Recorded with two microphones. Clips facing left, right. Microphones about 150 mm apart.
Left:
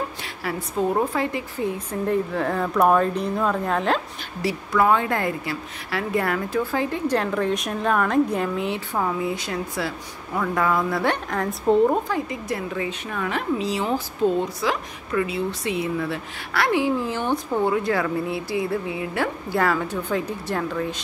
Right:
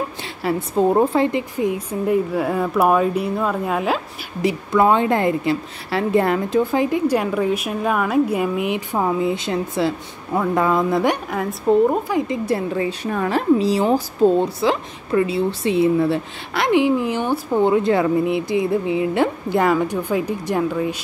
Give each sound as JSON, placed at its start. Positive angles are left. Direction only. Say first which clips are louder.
{"t": 0.4, "sound": "a woman's voice", "louder": "right 6 dB", "side_deg": -30}
{"t": 4.4, "sound": "a woman's voice", "louder": "right 4 dB", "side_deg": -20}
{"t": 11.2, "sound": "speech", "louder": "right 2 dB", "side_deg": -5}
{"t": 12.3, "sound": "a woman's voice", "louder": "right 7 dB", "side_deg": -30}